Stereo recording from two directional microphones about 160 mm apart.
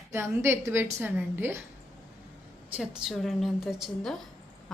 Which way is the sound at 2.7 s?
5° right (ahead or behind).